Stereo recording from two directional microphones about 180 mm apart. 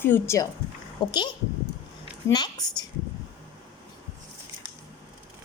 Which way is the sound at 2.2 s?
20° left (ahead or behind).